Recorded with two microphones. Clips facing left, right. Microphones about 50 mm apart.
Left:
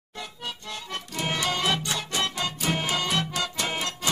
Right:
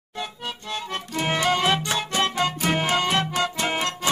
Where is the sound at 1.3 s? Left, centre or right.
Right.